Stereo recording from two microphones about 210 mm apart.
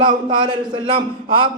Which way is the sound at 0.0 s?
25° right (ahead or behind).